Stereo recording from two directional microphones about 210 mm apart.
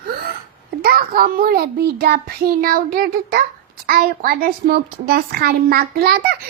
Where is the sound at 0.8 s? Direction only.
45° right (ahead or behind).